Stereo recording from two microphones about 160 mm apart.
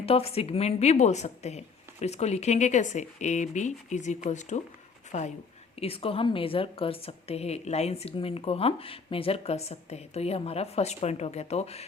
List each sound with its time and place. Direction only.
0.0 s a woman's voice: 40° left (ahead or behind)